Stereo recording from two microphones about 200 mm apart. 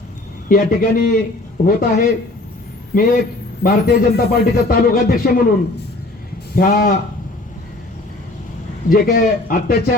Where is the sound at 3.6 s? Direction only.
45° left (ahead or behind).